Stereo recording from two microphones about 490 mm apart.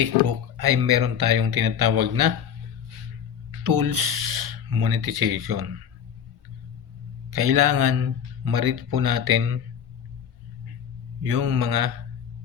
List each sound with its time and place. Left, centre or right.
0.0 s speech: right
3.6 s speech: right
7.3 s speech: right
11.2 s speech: right